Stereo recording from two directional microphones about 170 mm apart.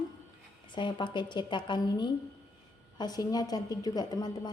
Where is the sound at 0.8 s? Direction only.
30° left (ahead or behind).